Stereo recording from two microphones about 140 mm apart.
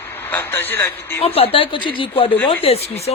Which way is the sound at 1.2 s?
45° left (ahead or behind).